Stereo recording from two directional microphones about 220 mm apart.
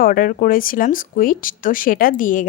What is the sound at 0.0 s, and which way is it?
A woman's voice, 40° left (ahead or behind).